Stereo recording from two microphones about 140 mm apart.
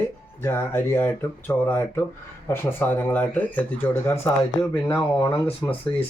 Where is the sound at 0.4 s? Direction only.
15° left (ahead or behind).